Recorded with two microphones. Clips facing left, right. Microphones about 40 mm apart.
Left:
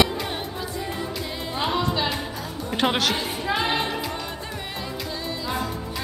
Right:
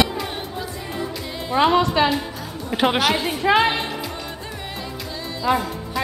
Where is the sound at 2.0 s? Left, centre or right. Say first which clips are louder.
Right 5 dB; centre.